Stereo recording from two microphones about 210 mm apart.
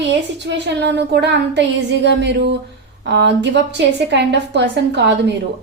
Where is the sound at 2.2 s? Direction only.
55° right (ahead or behind).